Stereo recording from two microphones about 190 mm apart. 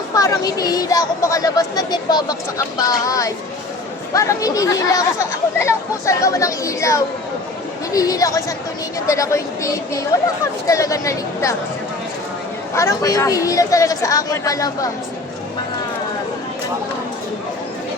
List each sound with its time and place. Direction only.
0.1 s a woman's voice: 15° left (ahead or behind)
12.7 s a woman's voice: 15° left (ahead or behind)